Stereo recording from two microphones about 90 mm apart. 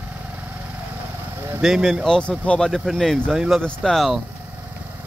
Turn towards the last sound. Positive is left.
turn(degrees=0)  # may be behind; listen again after turning